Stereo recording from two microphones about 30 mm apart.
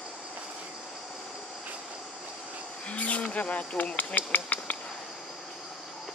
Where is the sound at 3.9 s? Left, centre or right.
Left.